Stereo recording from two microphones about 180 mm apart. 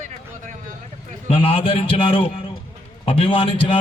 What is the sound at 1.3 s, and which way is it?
A man's voice, 30° left (ahead or behind).